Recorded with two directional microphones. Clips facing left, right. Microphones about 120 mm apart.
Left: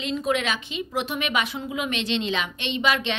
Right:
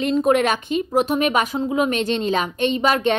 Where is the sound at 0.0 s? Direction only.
50° right (ahead or behind).